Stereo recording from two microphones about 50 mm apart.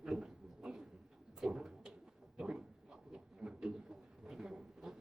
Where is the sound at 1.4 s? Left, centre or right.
Centre.